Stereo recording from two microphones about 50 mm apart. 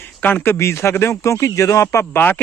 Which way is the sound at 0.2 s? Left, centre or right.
Left.